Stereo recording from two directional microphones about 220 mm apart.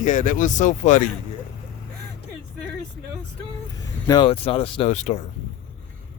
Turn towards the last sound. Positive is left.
turn(degrees=30)  # may be behind; listen again after turning